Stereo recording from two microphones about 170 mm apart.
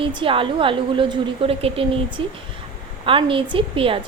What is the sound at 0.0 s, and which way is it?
A woman's voice, 30° right (ahead or behind).